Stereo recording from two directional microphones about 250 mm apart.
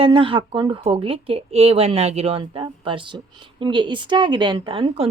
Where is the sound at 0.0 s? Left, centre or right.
Right.